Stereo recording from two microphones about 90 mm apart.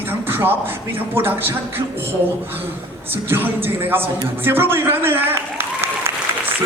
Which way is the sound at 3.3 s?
25° right (ahead or behind).